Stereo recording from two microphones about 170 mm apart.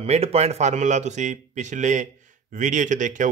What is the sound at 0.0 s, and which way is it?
Speech, 40° right (ahead or behind).